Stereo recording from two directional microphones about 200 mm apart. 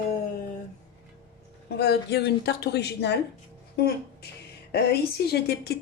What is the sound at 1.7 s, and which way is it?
A woman's voice, 55° left (ahead or behind).